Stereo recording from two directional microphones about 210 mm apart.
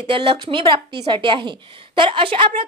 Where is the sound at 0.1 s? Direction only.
25° right (ahead or behind).